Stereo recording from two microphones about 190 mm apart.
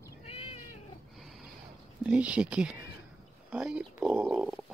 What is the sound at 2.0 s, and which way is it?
Speech, 5° right (ahead or behind).